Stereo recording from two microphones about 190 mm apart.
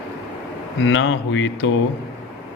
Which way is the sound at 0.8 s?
90° left.